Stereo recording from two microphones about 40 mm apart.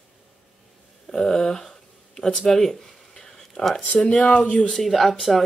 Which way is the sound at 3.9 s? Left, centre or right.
Left.